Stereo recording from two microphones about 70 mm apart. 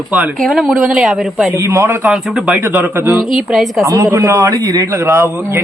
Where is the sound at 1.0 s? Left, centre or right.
Centre.